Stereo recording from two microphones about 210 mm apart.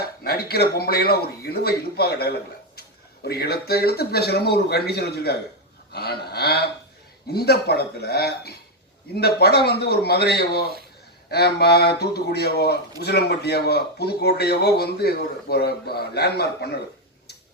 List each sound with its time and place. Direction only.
0.0 s speech: 50° left (ahead or behind)
5.9 s a sound: 50° left (ahead or behind)
7.3 s speech: 50° left (ahead or behind)